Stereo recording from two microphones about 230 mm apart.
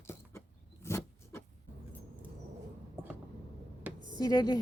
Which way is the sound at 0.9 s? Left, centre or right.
Centre.